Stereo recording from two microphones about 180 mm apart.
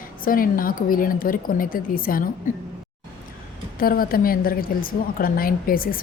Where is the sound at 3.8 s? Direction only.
55° left (ahead or behind).